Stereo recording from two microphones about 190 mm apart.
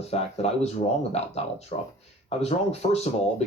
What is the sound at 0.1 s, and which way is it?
Speech, 30° left (ahead or behind).